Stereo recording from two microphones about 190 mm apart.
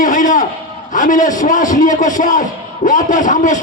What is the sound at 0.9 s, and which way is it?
A man's voice, 45° left (ahead or behind).